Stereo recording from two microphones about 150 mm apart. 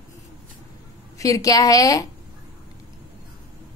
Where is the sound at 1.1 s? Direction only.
20° left (ahead or behind).